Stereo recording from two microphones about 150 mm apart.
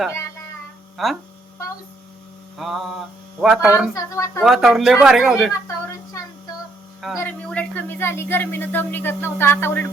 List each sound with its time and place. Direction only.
1.0 s speech: centre (ahead or behind)
2.6 s speech: centre (ahead or behind)
3.9 s speech: 20° left (ahead or behind)
4.4 s speech: centre (ahead or behind)
7.2 s speech: 10° left (ahead or behind)